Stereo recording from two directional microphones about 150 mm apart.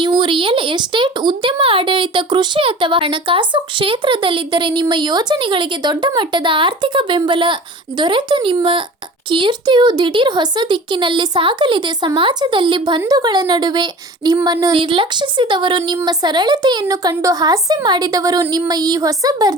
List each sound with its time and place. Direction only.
0.0 s a woman's voice: 30° right (ahead or behind)